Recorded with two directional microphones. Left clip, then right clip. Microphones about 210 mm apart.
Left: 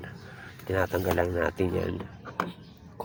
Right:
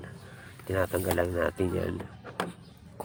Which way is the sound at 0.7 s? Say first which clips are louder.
Left 2 dB; 10° right (ahead or behind).